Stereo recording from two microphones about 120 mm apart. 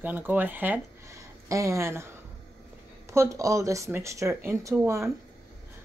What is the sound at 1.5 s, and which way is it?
Speech, 25° right (ahead or behind).